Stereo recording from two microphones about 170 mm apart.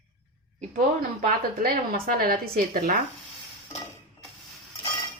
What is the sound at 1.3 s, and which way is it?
A woman's voice, 55° right (ahead or behind).